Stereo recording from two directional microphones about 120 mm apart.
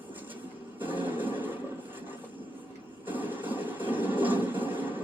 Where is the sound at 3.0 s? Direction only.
15° right (ahead or behind).